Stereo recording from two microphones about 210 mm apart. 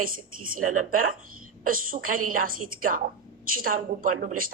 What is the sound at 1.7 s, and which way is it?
A woman's voice, 40° right (ahead or behind).